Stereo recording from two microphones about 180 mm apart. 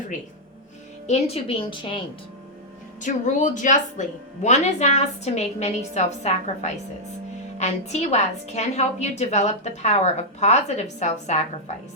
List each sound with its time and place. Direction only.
1.0 s a woman's voice: 35° left (ahead or behind)
3.0 s a woman's voice: 40° left (ahead or behind)